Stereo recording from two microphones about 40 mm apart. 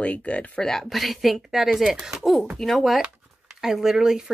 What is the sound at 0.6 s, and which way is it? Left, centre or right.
Speech, centre.